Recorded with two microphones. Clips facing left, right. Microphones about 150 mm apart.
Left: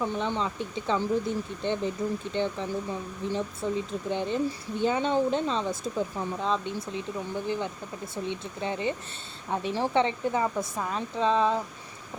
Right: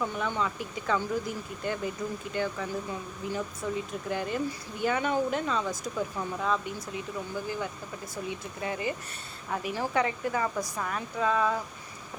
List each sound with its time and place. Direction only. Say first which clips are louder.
0.0 s speech: left 2 dB; 25° left (ahead or behind)